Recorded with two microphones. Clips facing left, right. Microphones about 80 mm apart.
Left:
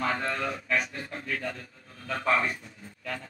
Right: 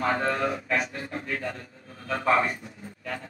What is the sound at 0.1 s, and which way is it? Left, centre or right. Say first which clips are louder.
Speech: right 5 dB; right.